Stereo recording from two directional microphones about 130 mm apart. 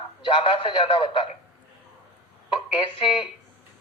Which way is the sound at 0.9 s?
40° left (ahead or behind).